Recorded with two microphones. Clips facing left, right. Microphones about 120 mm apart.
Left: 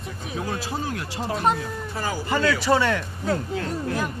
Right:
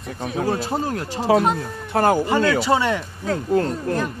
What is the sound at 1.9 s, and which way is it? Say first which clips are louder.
Speech: right 13 dB; 60° right (ahead or behind).